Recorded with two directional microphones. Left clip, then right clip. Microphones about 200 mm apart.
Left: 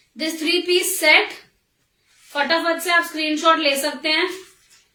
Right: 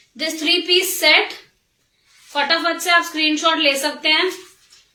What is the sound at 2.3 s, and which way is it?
A woman's voice, 5° left (ahead or behind).